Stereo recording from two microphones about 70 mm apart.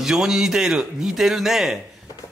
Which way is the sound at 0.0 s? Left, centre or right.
Centre.